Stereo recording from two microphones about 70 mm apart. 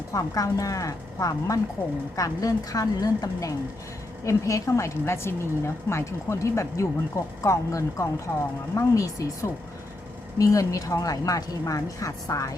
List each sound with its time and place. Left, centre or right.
0.1 s a woman's voice: left